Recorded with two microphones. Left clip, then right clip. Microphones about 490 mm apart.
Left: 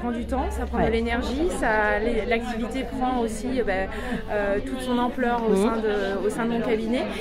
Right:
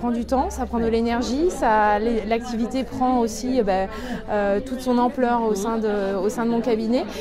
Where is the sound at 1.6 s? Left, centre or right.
Right.